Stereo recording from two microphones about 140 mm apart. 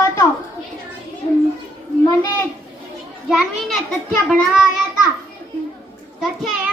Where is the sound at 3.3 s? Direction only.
5° right (ahead or behind).